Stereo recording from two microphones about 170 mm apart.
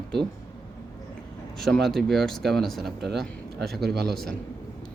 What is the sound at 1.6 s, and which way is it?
A man's voice, centre (ahead or behind).